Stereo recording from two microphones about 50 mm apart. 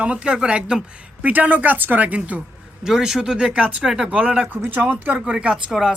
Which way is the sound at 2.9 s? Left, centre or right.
Centre.